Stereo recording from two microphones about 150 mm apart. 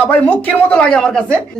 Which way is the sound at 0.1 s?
10° left (ahead or behind).